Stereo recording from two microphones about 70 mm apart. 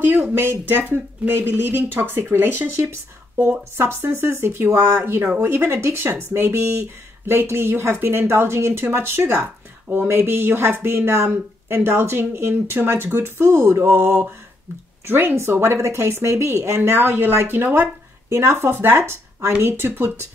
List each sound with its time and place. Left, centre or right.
0.0 s speech: right
16.9 s speech: right